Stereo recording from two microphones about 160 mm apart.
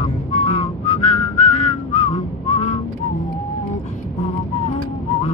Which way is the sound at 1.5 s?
45° left (ahead or behind).